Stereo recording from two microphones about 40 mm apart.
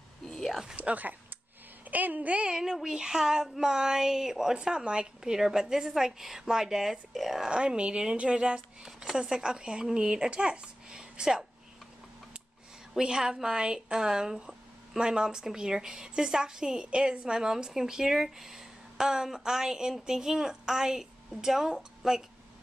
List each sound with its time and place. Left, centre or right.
0.7 s a woman's voice: right
2.4 s a woman's voice: centre
4.6 s a woman's voice: right; by 7.4 s centre
7.4 s speech: right
12.9 s a woman's voice: centre